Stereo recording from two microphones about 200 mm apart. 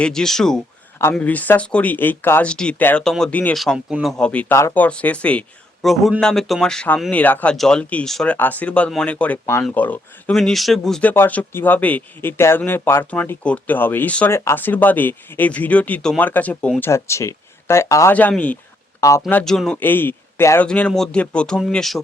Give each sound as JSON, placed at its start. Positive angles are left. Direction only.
{"t": 0.0, "sound": "a man's voice", "side_deg": 5}
{"t": 19.2, "sound": "speech", "side_deg": 5}